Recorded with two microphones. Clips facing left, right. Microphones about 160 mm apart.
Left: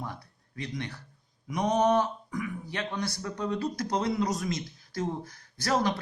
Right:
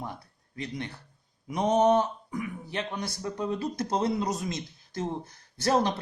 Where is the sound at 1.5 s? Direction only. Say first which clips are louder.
Right 2 dB; 25° right (ahead or behind).